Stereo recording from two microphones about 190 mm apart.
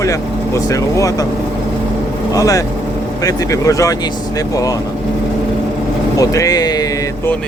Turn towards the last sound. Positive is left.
turn(degrees=20)  # may be behind; listen again after turning